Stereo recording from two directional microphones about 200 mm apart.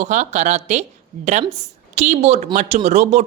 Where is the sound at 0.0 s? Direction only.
35° right (ahead or behind).